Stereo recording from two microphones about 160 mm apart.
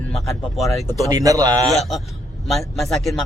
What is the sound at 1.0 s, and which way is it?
Speech, 20° right (ahead or behind).